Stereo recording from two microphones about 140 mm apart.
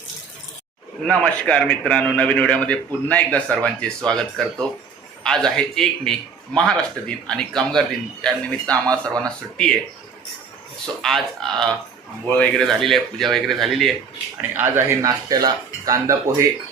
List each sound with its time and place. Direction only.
1.0 s a man's voice: 5° left (ahead or behind)
11.0 s a man's voice: centre (ahead or behind)
14.5 s speech: 15° right (ahead or behind)